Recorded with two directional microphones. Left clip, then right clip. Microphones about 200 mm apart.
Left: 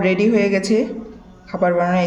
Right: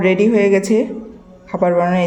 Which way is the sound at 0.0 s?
15° right (ahead or behind).